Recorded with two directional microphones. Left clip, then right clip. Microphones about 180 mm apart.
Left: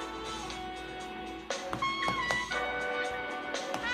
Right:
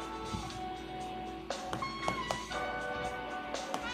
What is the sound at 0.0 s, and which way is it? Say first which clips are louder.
Music: left 2 dB; 15° left (ahead or behind).